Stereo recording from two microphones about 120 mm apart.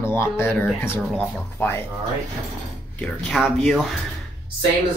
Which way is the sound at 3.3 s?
5° right (ahead or behind).